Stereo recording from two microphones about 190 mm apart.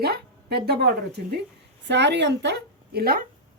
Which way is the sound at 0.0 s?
55° right (ahead or behind).